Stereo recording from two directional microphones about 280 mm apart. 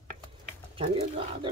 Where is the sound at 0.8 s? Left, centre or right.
Centre.